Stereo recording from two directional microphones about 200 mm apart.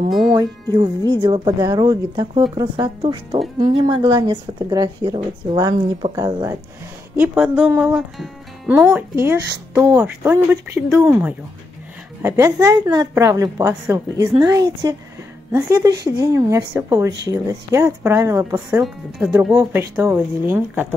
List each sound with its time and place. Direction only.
0.3 s a woman's voice: 20° right (ahead or behind)